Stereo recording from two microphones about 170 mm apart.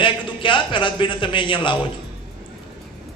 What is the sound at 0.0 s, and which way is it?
A man's voice, 30° left (ahead or behind).